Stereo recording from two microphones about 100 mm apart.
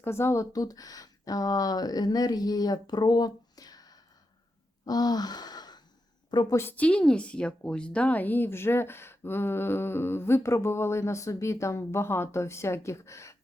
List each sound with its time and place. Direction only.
0.0 s speech: 25° left (ahead or behind)
0.5 s speech: 40° left (ahead or behind)
4.9 s gasp: 40° left (ahead or behind)
6.5 s speech: 20° left (ahead or behind)